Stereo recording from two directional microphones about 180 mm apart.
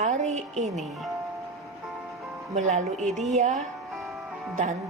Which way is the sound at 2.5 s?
40° right (ahead or behind).